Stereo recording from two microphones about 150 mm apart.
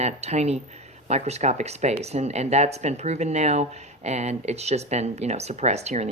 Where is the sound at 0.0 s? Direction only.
45° right (ahead or behind).